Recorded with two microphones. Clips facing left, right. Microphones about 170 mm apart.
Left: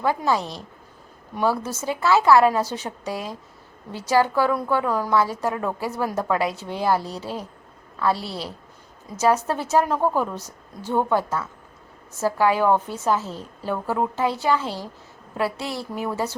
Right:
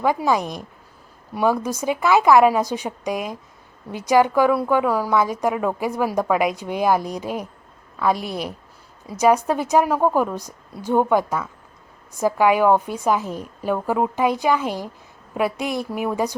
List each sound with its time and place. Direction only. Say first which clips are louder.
0.0 s a woman's voice: right 3 dB; 15° right (ahead or behind)